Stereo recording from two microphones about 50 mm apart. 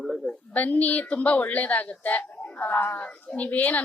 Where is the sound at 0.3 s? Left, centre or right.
Left.